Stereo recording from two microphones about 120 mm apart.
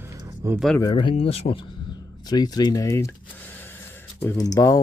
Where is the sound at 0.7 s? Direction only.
35° left (ahead or behind).